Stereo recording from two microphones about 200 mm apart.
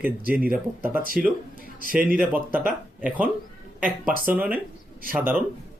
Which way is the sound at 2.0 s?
45° right (ahead or behind).